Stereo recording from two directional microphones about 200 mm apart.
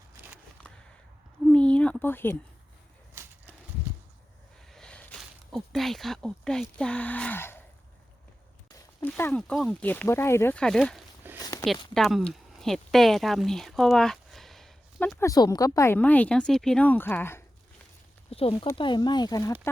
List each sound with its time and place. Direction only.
1.5 s speech: 5° left (ahead or behind)
4.7 s speech: 5° left (ahead or behind)
9.0 s speech: 10° left (ahead or behind)
11.3 s a sound: 20° left (ahead or behind)
11.9 s speech: centre (ahead or behind)
15.3 s speech: 15° left (ahead or behind)
18.3 s speech: 30° left (ahead or behind)